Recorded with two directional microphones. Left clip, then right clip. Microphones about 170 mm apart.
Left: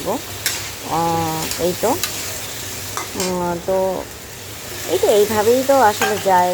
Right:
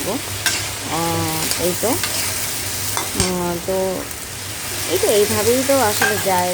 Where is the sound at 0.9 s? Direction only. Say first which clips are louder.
Left 4 dB; 5° right (ahead or behind).